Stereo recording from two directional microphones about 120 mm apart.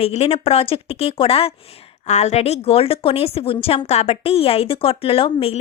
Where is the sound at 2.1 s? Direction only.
70° left (ahead or behind).